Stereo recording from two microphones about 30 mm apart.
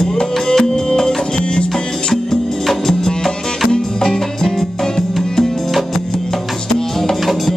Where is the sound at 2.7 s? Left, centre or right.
Centre.